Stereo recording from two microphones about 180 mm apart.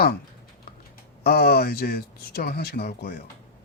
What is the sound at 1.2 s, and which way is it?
Speech, 60° left (ahead or behind).